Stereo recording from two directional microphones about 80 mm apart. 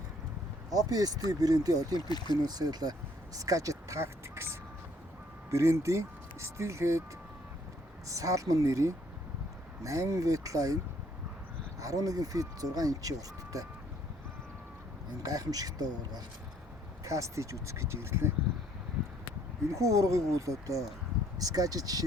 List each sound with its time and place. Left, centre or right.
0.7 s speech: right
2.0 s speech: left
2.5 s speech: right
3.3 s speech: right
8.0 s speech: right
11.8 s speech: right
15.2 s speech: right
17.0 s speech: right
19.7 s speech: right